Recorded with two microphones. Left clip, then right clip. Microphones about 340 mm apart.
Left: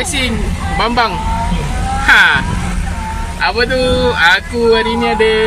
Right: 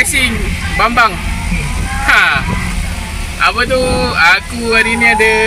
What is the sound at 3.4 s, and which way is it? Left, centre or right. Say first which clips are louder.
Speech: right 1 dB; right.